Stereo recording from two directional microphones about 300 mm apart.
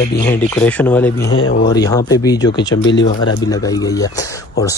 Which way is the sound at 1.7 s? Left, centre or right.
Centre.